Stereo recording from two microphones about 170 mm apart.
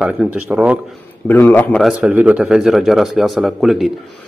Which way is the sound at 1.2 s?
10° left (ahead or behind).